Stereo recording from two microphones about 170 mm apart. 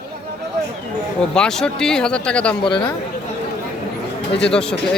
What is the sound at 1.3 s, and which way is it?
Speech, 5° left (ahead or behind).